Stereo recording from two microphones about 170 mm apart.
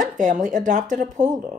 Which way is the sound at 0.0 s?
50° right (ahead or behind).